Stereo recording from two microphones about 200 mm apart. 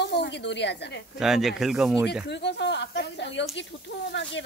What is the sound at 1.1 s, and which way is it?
Speech, centre (ahead or behind).